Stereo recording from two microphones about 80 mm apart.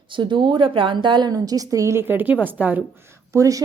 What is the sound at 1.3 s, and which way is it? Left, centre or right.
A woman's voice, right.